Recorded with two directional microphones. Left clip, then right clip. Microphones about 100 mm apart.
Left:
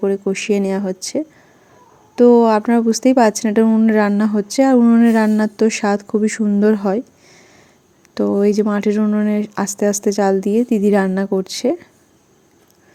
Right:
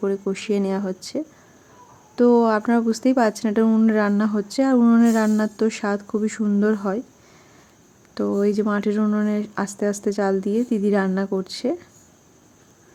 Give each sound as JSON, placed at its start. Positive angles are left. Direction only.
{"t": 0.0, "sound": "a woman's voice", "side_deg": 25}
{"t": 4.8, "sound": "speech", "side_deg": 15}
{"t": 5.0, "sound": "a woman's voice", "side_deg": 30}
{"t": 8.1, "sound": "a woman's voice", "side_deg": 30}